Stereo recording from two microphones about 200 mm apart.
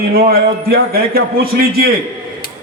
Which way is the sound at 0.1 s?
50° right (ahead or behind).